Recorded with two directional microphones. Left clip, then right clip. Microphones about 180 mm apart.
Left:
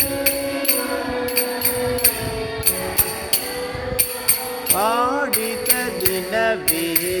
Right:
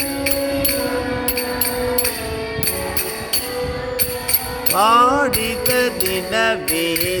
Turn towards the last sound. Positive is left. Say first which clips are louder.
# right 2 dB
turn(degrees=-40)  # may be behind; listen again after turning